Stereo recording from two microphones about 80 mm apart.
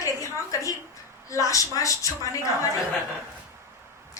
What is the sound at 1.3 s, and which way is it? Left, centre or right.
A woman's voice, left.